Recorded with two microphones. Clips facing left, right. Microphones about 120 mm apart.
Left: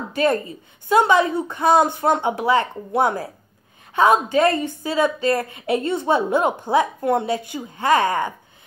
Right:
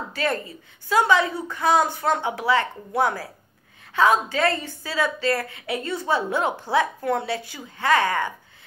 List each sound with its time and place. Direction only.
0.1 s a woman's voice: 20° left (ahead or behind)